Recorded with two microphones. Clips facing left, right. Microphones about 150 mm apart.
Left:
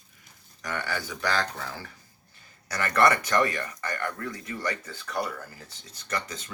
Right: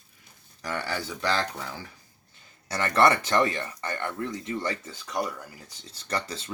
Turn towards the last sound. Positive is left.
turn(degrees=-30)  # may be behind; listen again after turning